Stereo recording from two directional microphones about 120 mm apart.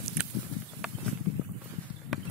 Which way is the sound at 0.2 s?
10° right (ahead or behind).